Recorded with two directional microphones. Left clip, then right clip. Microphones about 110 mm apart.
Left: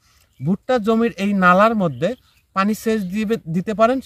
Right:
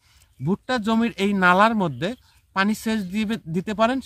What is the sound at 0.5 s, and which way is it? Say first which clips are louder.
Speech: left 5 dB; 15° left (ahead or behind).